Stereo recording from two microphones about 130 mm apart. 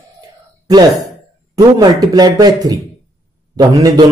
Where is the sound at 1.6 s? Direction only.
30° right (ahead or behind).